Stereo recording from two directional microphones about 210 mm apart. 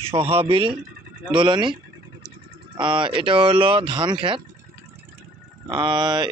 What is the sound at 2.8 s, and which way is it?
A man's voice, 25° right (ahead or behind).